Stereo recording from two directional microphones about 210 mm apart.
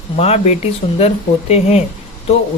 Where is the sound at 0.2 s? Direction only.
30° left (ahead or behind).